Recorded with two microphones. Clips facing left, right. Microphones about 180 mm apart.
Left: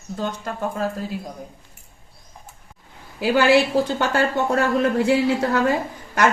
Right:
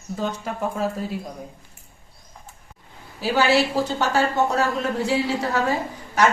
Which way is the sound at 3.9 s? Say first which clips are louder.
Even; 55° left (ahead or behind).